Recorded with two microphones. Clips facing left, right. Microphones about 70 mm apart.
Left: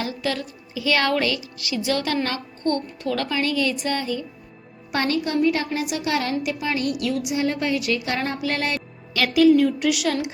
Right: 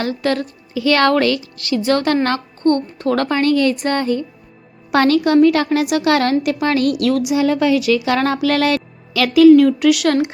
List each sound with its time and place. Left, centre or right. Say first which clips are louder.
0.0 s a woman's voice: right 7 dB; right
4.9 s a woman's voice: right 10 dB; right